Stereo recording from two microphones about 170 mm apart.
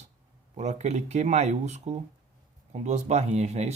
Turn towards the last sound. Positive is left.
turn(degrees=-40)  # may be behind; listen again after turning